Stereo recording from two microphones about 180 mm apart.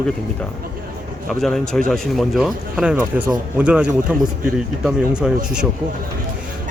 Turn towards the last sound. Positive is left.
turn(degrees=-5)  # may be behind; listen again after turning